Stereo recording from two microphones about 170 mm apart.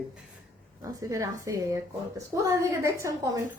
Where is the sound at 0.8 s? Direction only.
20° right (ahead or behind).